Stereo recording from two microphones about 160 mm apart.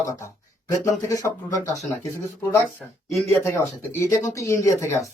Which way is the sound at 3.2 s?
15° left (ahead or behind).